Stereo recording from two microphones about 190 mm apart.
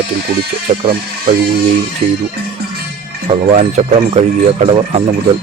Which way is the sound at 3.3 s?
30° right (ahead or behind).